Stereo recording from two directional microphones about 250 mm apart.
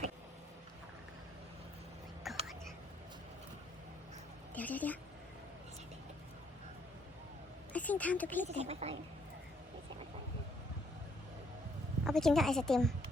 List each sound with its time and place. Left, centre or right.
2.3 s whispering: centre
4.5 s a woman's voice: centre
7.7 s speech: centre
8.4 s speech: right
12.0 s a woman's voice: centre